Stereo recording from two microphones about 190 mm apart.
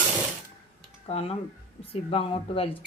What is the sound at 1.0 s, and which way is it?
A woman's voice, 30° left (ahead or behind).